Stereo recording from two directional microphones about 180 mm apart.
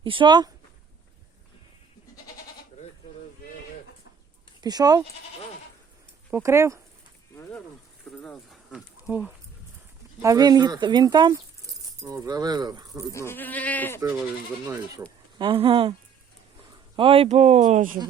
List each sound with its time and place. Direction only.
0.0 s speech: 30° right (ahead or behind)
4.6 s speech: 20° right (ahead or behind)
6.3 s speech: 15° right (ahead or behind)
8.1 s speech: 5° left (ahead or behind)
10.2 s speech: 20° right (ahead or behind)
13.1 s speech: 10° left (ahead or behind)
15.4 s speech: 30° right (ahead or behind)
17.0 s speech: 30° right (ahead or behind)